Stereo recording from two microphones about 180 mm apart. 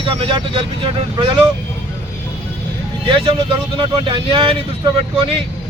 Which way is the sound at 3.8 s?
30° right (ahead or behind).